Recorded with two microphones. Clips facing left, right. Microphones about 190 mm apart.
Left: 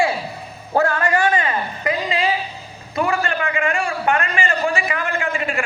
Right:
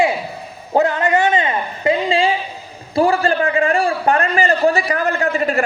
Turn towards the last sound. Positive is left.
turn(degrees=-40)  # may be behind; listen again after turning